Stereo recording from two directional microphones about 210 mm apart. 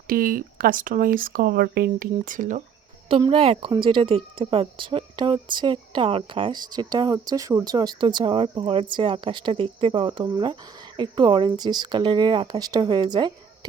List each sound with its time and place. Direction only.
0.1 s speech: 40° right (ahead or behind)
3.1 s speech: 25° right (ahead or behind)